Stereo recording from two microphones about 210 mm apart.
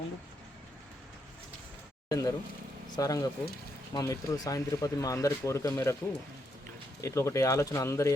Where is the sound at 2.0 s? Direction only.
15° left (ahead or behind).